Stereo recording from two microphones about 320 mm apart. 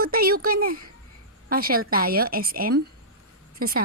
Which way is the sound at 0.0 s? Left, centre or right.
Right.